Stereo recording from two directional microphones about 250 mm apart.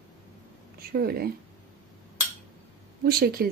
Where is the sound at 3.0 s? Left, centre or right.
Right.